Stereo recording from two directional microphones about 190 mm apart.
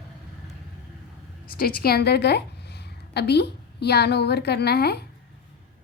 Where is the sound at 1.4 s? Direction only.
50° left (ahead or behind).